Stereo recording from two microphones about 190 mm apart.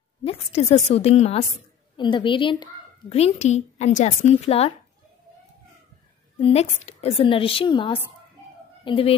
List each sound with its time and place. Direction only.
0.2 s a woman's voice: 30° left (ahead or behind)
6.4 s a woman's voice: 35° left (ahead or behind)